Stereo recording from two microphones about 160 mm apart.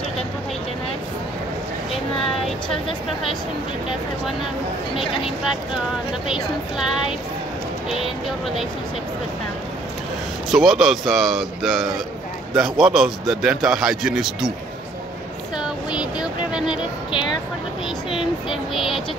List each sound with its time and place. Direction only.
6.2 s a man's voice: 5° right (ahead or behind)
10.5 s a man's voice: centre (ahead or behind)
15.5 s a man's voice: 5° right (ahead or behind)
18.1 s a man's voice: centre (ahead or behind)